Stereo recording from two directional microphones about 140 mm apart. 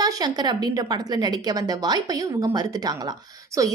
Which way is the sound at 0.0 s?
30° right (ahead or behind).